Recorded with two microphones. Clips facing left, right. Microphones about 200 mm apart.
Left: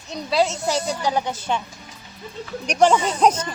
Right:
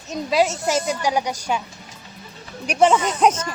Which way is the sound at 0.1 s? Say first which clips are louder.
Right 1 dB; 15° right (ahead or behind).